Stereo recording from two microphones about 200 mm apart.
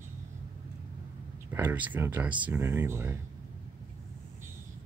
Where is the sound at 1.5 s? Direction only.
10° right (ahead or behind).